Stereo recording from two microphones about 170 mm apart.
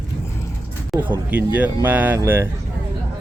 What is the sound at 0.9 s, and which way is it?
Speech, centre (ahead or behind).